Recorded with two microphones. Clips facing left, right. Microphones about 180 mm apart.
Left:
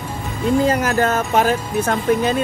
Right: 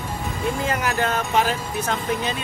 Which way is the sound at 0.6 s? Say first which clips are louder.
Left 6 dB; 40° left (ahead or behind).